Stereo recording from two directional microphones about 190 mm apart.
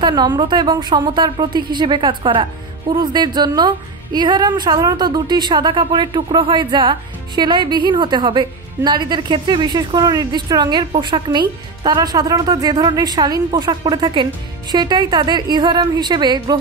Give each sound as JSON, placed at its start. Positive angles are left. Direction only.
{"t": 0.0, "sound": "speech", "side_deg": -20}